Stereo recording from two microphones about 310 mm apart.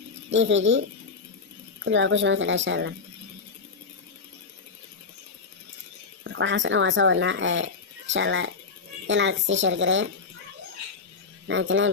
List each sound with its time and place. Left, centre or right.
0.3 s a woman's voice: right
6.2 s a woman's voice: right
11.4 s a woman's voice: right